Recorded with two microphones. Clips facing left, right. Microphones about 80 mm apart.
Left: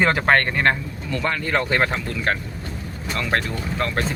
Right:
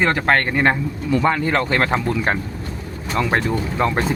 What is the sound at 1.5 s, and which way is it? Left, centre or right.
Speech, centre.